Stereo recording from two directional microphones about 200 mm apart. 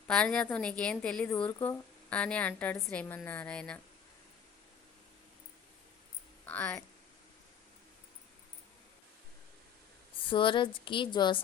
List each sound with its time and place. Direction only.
0.1 s a woman's voice: 5° left (ahead or behind)
6.4 s speech: 10° left (ahead or behind)
10.2 s speech: 25° left (ahead or behind)